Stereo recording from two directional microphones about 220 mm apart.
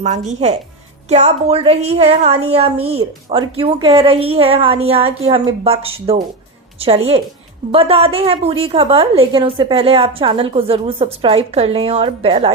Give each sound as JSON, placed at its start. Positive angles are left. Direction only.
{"t": 0.0, "sound": "a woman's voice", "side_deg": -35}